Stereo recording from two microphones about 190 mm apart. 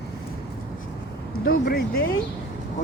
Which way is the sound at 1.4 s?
55° left (ahead or behind).